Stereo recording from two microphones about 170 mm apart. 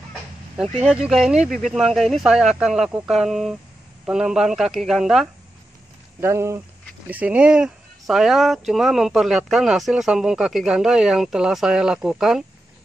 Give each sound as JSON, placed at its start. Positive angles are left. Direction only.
{"t": 0.8, "sound": "speech", "side_deg": -5}
{"t": 6.2, "sound": "speech", "side_deg": -15}